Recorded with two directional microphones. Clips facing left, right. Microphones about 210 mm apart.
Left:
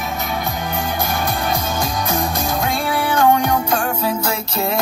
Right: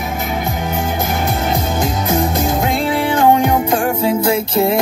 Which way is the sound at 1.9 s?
25° right (ahead or behind).